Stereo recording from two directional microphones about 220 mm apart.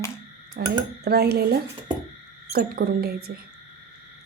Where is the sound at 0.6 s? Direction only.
40° right (ahead or behind).